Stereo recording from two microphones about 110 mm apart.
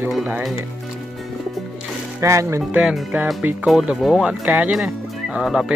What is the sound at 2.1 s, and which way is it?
Speech, 25° right (ahead or behind).